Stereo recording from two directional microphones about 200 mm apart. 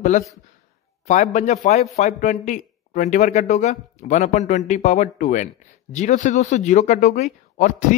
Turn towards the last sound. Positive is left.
turn(degrees=40)  # may be behind; listen again after turning